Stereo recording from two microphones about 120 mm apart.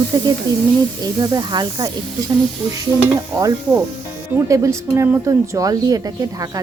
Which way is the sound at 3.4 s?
30° right (ahead or behind).